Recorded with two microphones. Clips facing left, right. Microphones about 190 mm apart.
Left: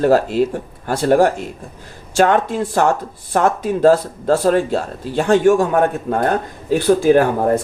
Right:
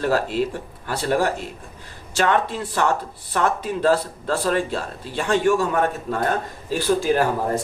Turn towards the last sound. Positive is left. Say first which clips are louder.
# left 7 dB
turn(degrees=55)  # may be behind; listen again after turning